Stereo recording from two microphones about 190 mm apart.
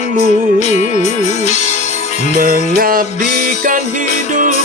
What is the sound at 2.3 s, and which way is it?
Music, 50° right (ahead or behind).